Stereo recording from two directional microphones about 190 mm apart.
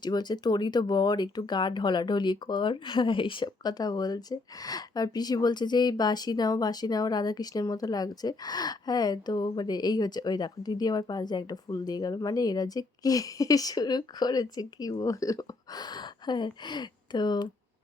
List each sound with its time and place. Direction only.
0.0 s speech: 20° left (ahead or behind)